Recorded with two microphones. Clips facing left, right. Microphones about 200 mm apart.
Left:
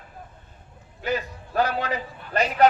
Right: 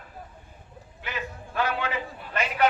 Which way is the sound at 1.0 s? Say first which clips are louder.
Left 8 dB; 40° left (ahead or behind).